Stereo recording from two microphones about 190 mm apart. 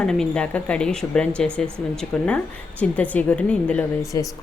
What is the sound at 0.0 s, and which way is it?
A woman's voice, 5° left (ahead or behind).